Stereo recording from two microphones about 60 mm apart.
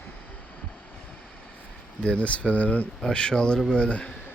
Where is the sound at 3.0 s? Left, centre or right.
Centre.